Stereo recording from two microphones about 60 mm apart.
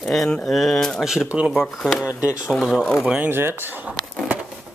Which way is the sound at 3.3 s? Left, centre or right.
Right.